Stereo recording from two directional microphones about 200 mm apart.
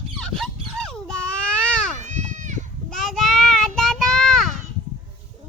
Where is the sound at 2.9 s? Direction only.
Centre (ahead or behind).